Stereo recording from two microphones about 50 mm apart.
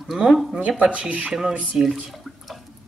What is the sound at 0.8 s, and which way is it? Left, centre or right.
Speech, right.